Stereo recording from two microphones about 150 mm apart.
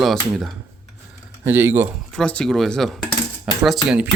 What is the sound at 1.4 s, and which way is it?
Speech, 15° right (ahead or behind).